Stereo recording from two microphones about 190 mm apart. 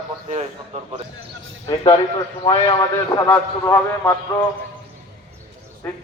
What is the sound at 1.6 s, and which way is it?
Speech, 20° left (ahead or behind).